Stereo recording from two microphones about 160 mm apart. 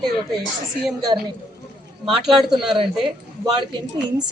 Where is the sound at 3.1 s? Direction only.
30° right (ahead or behind).